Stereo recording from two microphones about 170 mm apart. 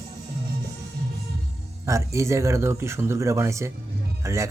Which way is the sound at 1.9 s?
20° right (ahead or behind).